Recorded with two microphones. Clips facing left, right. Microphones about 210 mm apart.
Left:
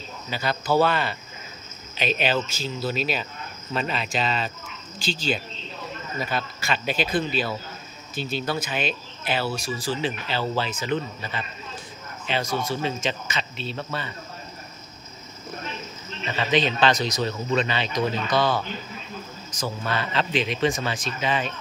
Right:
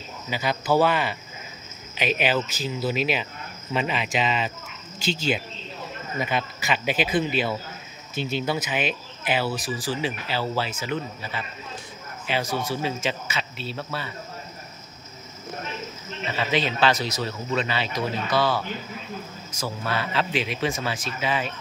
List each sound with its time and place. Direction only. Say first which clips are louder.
0.3 s speech: right 1 dB; 15° right (ahead or behind)
6.1 s speech: right 2 dB; 20° right (ahead or behind)
12.4 s speech: left 1 dB; 15° left (ahead or behind)
12.7 s speech: even; 10° right (ahead or behind)
16.3 s speech: left 2 dB; 5° right (ahead or behind)
19.6 s speech: even; 10° right (ahead or behind)